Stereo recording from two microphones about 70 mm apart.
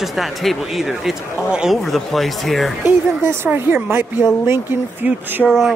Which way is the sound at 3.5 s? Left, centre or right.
Right.